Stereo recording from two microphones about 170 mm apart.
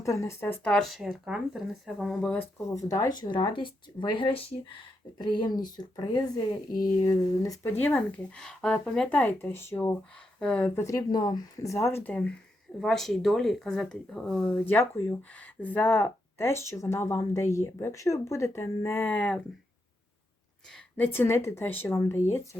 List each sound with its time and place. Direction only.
0.0 s speech: 15° left (ahead or behind)
2.7 s speech: 20° left (ahead or behind)
10.8 s speech: 20° left (ahead or behind)
20.9 s speech: 10° left (ahead or behind)